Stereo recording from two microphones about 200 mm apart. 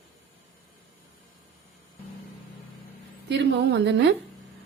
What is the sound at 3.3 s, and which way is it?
Speech, 60° right (ahead or behind).